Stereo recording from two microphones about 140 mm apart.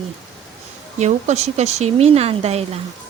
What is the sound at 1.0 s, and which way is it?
Speech, 55° right (ahead or behind).